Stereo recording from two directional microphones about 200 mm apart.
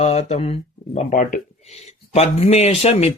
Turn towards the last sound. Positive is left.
turn(degrees=30)  # may be behind; listen again after turning